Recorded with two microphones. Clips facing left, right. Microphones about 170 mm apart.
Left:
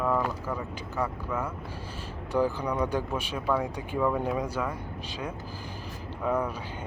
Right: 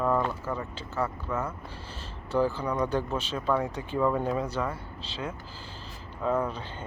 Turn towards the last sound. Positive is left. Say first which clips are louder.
# even
turn(degrees=15)  # may be behind; listen again after turning